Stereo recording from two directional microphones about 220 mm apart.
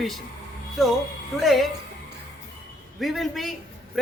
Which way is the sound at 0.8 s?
Centre (ahead or behind).